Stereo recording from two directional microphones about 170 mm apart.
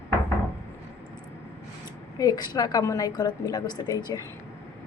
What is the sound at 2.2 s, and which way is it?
Speech, 20° left (ahead or behind).